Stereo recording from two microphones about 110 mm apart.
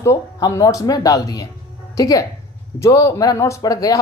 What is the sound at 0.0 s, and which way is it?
Speech, 25° left (ahead or behind).